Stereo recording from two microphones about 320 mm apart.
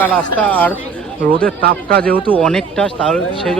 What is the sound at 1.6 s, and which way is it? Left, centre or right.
Speech, right.